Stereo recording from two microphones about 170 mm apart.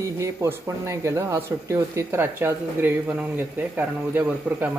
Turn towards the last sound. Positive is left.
turn(degrees=-10)  # may be behind; listen again after turning